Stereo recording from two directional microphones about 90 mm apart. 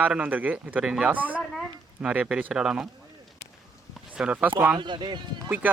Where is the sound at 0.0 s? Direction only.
15° right (ahead or behind).